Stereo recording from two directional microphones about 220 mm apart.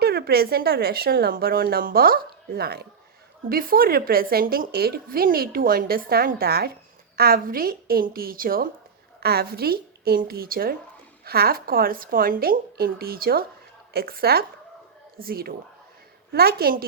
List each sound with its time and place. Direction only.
0.0 s a woman's voice: 45° right (ahead or behind)